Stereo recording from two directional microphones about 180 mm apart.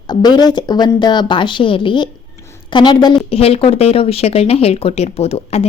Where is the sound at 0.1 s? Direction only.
25° left (ahead or behind).